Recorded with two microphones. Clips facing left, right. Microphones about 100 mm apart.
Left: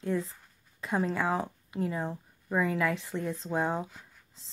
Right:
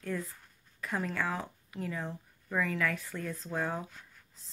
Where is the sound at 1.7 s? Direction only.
30° left (ahead or behind).